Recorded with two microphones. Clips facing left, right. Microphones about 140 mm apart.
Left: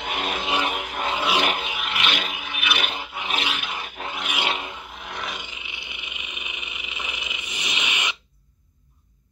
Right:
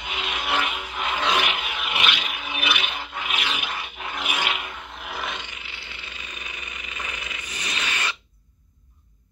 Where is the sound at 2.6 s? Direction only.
40° right (ahead or behind).